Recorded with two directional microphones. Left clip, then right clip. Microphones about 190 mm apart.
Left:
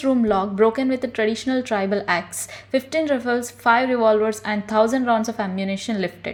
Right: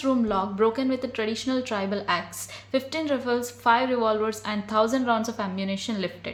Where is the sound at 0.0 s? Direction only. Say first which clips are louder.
Left 5 dB; 20° left (ahead or behind).